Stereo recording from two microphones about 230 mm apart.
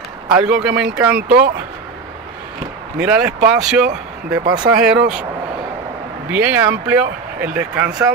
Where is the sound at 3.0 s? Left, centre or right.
Centre.